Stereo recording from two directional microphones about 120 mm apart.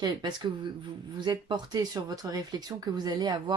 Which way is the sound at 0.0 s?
40° right (ahead or behind).